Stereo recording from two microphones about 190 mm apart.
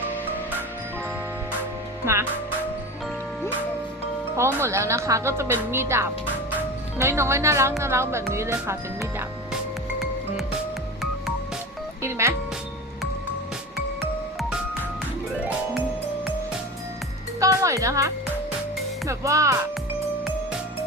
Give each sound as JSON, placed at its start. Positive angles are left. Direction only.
{"t": 2.1, "sound": "speech", "side_deg": -15}
{"t": 4.4, "sound": "speech", "side_deg": -15}
{"t": 12.0, "sound": "speech", "side_deg": -15}
{"t": 15.3, "sound": "music", "side_deg": -5}
{"t": 17.4, "sound": "music", "side_deg": -15}
{"t": 19.0, "sound": "speech", "side_deg": -15}